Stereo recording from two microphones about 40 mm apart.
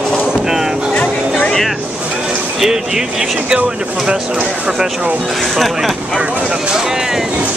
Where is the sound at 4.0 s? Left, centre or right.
Right.